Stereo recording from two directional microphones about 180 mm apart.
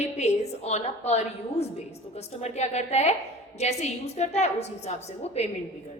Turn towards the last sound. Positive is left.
turn(degrees=35)  # may be behind; listen again after turning